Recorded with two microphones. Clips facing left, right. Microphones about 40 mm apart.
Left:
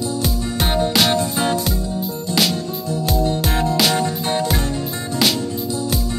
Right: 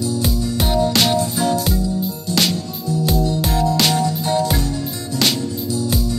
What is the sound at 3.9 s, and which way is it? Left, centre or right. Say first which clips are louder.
Music: right 1 dB; left.